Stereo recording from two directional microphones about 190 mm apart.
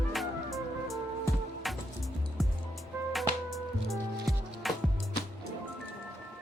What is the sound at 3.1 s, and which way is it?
Music, centre (ahead or behind).